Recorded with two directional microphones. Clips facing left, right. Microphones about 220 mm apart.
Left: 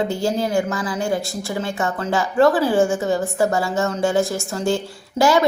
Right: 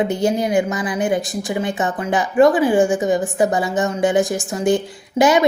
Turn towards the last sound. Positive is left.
turn(degrees=-20)  # may be behind; listen again after turning